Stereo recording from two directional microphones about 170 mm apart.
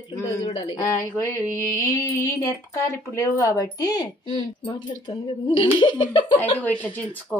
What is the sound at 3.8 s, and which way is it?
A woman's voice, 25° left (ahead or behind).